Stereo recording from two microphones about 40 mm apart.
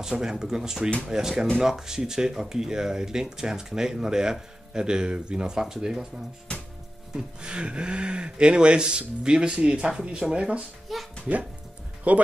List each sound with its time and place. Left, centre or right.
0.1 s speech: centre
7.2 s speech: right
10.9 s a child's voice: centre
12.1 s speech: right